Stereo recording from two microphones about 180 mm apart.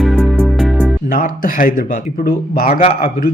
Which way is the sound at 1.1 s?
50° left (ahead or behind).